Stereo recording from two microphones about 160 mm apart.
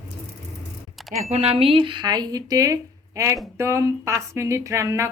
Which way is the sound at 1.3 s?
35° right (ahead or behind).